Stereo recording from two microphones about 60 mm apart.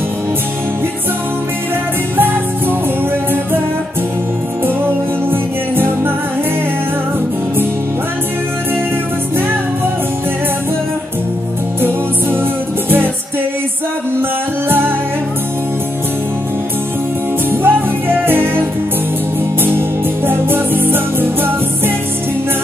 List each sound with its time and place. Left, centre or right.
2.1 s music: right
5.3 s music: right
17.5 s music: right
20.2 s music: right